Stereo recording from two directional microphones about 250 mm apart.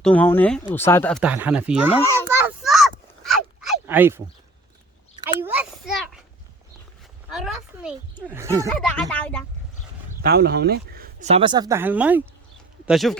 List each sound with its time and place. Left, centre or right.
0.0 s speech: centre
1.2 s speech: centre
2.2 s a sound: centre
5.2 s a sound: centre
7.3 s speech: centre
8.7 s speech: centre
10.2 s speech: right; by 13.1 s centre